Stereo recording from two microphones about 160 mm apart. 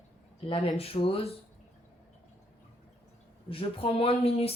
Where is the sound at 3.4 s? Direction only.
35° left (ahead or behind).